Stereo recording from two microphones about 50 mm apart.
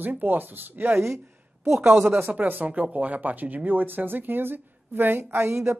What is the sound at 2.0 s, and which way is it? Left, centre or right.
Speech, right.